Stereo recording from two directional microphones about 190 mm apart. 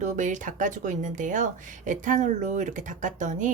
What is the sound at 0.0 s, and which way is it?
Speech, 40° right (ahead or behind).